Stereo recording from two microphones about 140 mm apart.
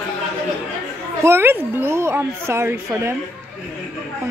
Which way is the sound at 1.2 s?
15° right (ahead or behind).